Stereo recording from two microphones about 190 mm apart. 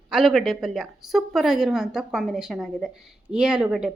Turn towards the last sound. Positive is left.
turn(degrees=-5)  # may be behind; listen again after turning